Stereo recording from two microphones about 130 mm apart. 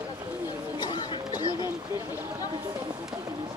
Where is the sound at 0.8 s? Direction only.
35° left (ahead or behind).